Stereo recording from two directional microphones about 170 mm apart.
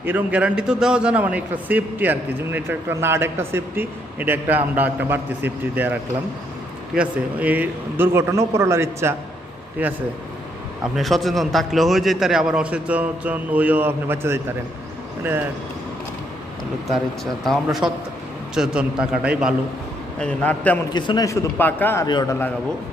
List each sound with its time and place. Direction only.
0.0 s a man's voice: 10° right (ahead or behind)
10.9 s a man's voice: centre (ahead or behind)
17.4 s a man's voice: centre (ahead or behind)
20.1 s a man's voice: 5° left (ahead or behind)
20.9 s a man's voice: 25° left (ahead or behind)
21.6 s a man's voice: 10° left (ahead or behind)
22.0 s a man's voice: 25° left (ahead or behind)